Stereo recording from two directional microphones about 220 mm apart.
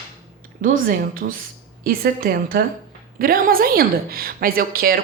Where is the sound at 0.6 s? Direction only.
40° right (ahead or behind).